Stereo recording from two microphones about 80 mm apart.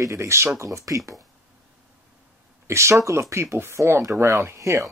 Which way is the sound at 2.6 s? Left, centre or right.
Right.